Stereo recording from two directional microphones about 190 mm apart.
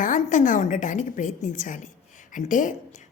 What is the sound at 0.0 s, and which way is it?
A woman's voice, 40° left (ahead or behind).